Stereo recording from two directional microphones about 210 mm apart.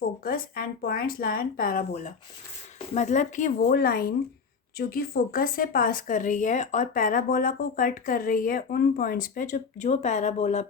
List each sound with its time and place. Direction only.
0.3 s speech: 45° left (ahead or behind)